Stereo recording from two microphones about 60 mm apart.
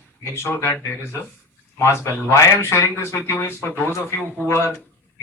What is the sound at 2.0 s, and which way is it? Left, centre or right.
Speech, left.